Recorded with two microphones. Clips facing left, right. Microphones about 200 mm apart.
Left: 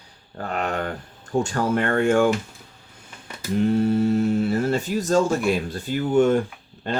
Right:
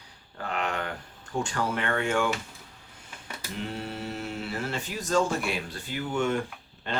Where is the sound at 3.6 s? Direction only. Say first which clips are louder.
Left 16 dB; 45° left (ahead or behind).